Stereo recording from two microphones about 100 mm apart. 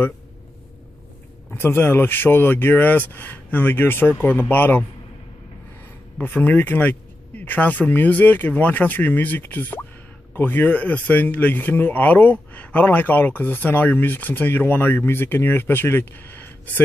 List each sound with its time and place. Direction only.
1.5 s speech: 25° left (ahead or behind)
6.1 s a man's voice: 15° left (ahead or behind)